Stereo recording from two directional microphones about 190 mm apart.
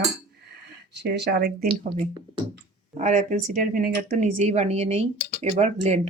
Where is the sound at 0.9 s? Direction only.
65° right (ahead or behind).